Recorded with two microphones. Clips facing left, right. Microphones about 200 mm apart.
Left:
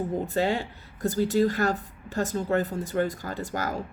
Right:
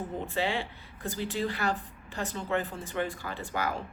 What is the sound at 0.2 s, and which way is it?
Speech, 40° left (ahead or behind).